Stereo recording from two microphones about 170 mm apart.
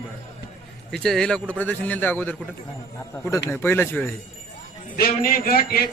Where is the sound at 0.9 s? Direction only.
5° left (ahead or behind).